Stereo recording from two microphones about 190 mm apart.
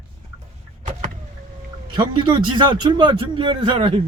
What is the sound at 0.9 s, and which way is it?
Vehicle, 40° right (ahead or behind).